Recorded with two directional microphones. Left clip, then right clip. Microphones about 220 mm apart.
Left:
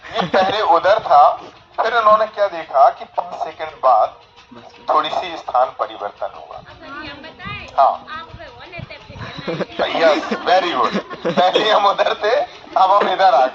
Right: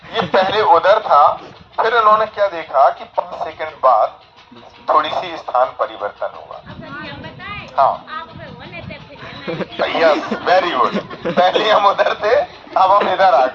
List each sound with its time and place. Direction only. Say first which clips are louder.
0.1 s a sound: right 1 dB; 25° right (ahead or behind)
0.5 s speech: right 4 dB; 25° right (ahead or behind)
7.0 s vehicle: right 1 dB; centre (ahead or behind)
8.7 s a sound: right 2 dB; 10° left (ahead or behind)
9.8 s a man's voice: right 1 dB; 15° right (ahead or behind)
10.2 s speech: even; centre (ahead or behind)
10.4 s a man's voice: right 2 dB; 15° right (ahead or behind)
10.8 s speech: even; 10° left (ahead or behind)
11.3 s a man's voice: right 1 dB; 15° right (ahead or behind)